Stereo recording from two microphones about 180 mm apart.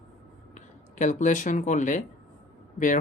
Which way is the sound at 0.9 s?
45° left (ahead or behind).